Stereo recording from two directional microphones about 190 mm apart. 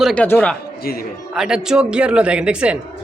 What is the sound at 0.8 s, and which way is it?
Speech, 50° left (ahead or behind).